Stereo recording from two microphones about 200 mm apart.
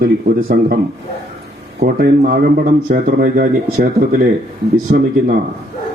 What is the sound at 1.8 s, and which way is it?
Speech, 50° right (ahead or behind).